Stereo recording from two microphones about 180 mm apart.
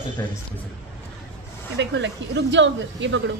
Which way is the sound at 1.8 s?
80° right.